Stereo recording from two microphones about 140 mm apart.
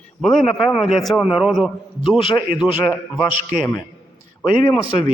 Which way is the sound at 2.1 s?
40° left (ahead or behind).